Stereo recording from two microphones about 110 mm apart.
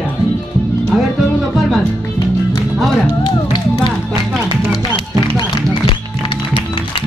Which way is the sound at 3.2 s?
40° left (ahead or behind).